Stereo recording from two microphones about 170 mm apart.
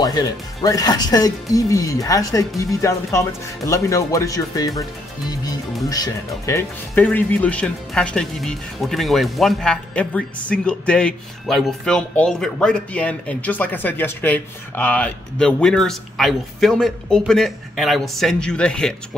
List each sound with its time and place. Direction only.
0.0 s speech: 25° left (ahead or behind)
5.9 s speech: 20° left (ahead or behind)